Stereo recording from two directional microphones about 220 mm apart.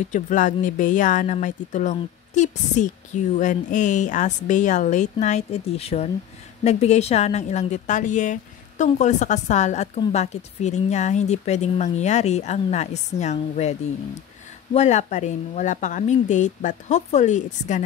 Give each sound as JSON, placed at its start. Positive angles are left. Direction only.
{"t": 0.1, "sound": "a woman's voice", "side_deg": 35}